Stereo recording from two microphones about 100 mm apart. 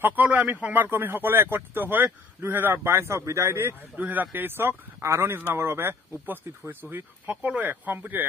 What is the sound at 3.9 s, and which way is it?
Speech, 15° right (ahead or behind).